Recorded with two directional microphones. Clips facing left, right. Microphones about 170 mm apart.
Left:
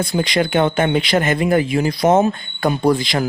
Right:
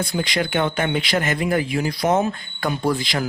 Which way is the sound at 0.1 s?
25° left (ahead or behind).